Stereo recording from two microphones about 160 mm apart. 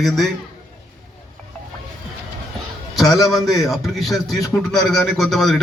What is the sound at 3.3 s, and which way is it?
A man's voice, centre (ahead or behind).